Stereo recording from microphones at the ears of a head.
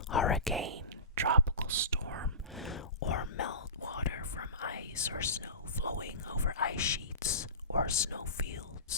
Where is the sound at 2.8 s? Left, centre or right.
Left.